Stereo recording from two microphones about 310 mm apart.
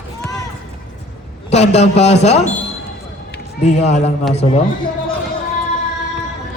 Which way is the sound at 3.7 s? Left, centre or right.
Left.